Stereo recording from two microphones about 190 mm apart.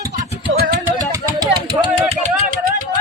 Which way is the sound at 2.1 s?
40° right (ahead or behind).